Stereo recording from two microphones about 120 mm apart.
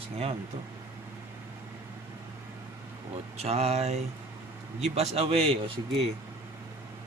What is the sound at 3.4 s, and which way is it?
Speech, 60° right (ahead or behind).